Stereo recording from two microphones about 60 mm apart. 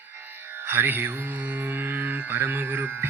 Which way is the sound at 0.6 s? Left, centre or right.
Right.